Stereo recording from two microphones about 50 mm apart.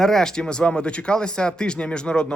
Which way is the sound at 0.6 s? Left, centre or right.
Left.